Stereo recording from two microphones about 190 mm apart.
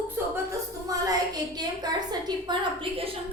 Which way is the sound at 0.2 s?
10° right (ahead or behind).